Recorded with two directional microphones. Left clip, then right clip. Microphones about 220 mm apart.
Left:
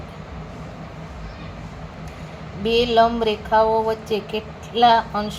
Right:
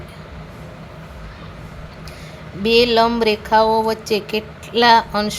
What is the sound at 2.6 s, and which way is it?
A woman's voice, 40° right (ahead or behind).